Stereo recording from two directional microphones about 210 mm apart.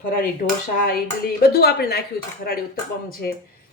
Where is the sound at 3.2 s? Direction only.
50° left (ahead or behind).